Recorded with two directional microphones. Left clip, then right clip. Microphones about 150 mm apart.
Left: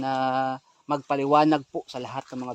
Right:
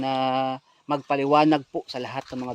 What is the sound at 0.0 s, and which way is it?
Speech, centre (ahead or behind).